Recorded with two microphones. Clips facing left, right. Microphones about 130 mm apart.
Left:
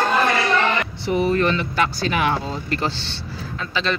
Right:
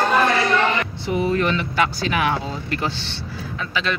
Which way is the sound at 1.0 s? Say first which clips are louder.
Left 2 dB; 15° right (ahead or behind).